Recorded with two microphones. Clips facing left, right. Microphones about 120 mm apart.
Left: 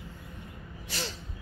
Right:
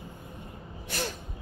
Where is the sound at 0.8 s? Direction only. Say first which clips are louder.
Right 4 dB; 50° right (ahead or behind).